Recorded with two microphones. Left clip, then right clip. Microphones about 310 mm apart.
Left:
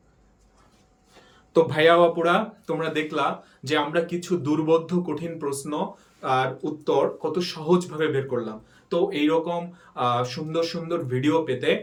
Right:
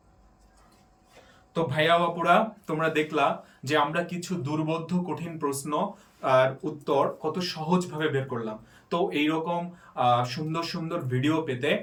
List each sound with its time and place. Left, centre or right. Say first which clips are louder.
1.5 s speech: left 6 dB; centre